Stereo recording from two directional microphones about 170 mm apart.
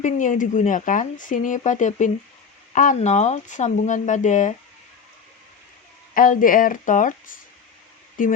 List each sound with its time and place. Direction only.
0.0 s speech: 50° left (ahead or behind)
6.1 s speech: 55° left (ahead or behind)